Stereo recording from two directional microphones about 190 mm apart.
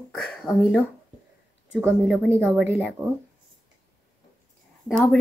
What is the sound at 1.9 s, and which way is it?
Speech, 5° left (ahead or behind).